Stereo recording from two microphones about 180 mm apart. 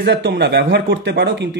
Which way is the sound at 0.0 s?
70° right (ahead or behind).